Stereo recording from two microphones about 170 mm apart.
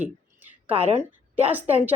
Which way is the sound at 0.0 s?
10° right (ahead or behind).